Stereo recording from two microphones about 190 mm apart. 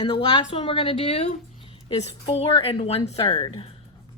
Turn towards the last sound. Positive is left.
turn(degrees=30)  # may be behind; listen again after turning